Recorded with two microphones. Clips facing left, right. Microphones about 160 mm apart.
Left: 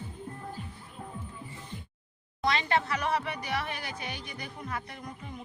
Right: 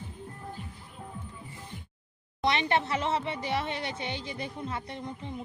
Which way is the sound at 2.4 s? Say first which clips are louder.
Right 1 dB; 25° right (ahead or behind).